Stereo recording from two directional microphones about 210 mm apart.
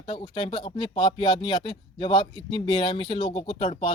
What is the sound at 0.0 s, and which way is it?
Speech, 25° left (ahead or behind).